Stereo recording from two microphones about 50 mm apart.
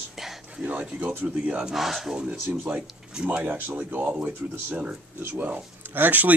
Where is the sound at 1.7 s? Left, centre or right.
Centre.